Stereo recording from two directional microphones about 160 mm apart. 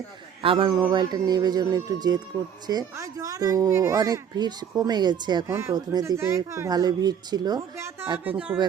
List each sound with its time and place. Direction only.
0.4 s a man's voice: 35° right (ahead or behind); by 8.5 s 10° right (ahead or behind)